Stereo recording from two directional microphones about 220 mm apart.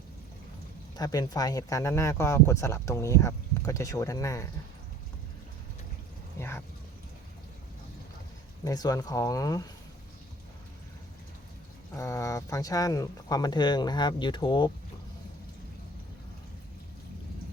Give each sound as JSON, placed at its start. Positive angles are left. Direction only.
{"t": 0.9, "sound": "speech", "side_deg": 15}
{"t": 6.4, "sound": "a sound", "side_deg": 10}
{"t": 8.6, "sound": "speech", "side_deg": 15}
{"t": 11.9, "sound": "speech", "side_deg": 15}